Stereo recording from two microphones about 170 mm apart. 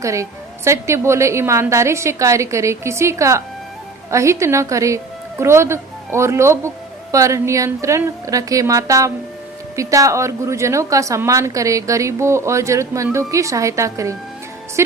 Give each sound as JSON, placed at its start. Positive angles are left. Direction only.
{"t": 0.0, "sound": "a woman's voice", "side_deg": -20}